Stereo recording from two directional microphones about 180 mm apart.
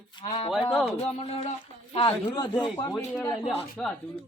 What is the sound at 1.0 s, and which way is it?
A woman's voice, 35° left (ahead or behind).